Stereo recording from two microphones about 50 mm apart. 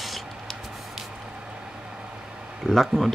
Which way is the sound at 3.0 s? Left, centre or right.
Centre.